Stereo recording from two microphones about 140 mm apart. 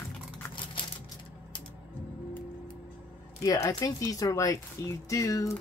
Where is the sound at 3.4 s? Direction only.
25° left (ahead or behind).